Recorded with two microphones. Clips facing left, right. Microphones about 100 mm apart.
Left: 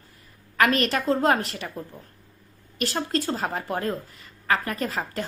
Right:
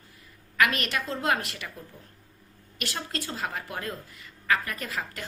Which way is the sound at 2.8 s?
35° left (ahead or behind).